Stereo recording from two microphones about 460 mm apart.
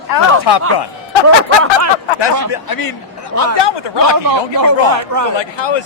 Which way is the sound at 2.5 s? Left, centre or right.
Left.